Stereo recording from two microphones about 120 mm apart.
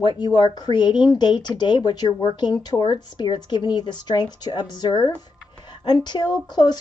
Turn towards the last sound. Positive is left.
turn(degrees=35)  # may be behind; listen again after turning